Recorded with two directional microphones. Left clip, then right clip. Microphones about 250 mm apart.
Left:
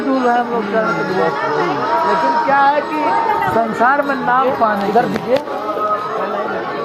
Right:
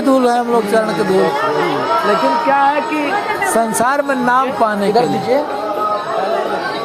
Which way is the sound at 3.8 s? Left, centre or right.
Right.